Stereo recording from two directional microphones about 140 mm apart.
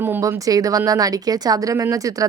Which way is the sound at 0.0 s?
15° right (ahead or behind).